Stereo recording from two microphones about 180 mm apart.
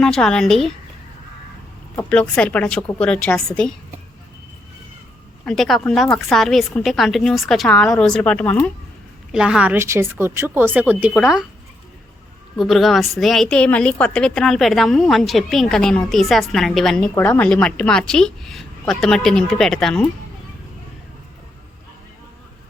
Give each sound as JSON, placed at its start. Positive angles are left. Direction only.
{"t": 0.0, "sound": "a woman's voice", "side_deg": 5}
{"t": 2.0, "sound": "a woman's voice", "side_deg": 5}
{"t": 5.5, "sound": "a woman's voice", "side_deg": 0}
{"t": 9.3, "sound": "a woman's voice", "side_deg": -5}
{"t": 12.5, "sound": "a woman's voice", "side_deg": 0}